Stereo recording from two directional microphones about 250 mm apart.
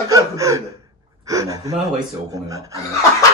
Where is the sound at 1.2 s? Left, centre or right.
Centre.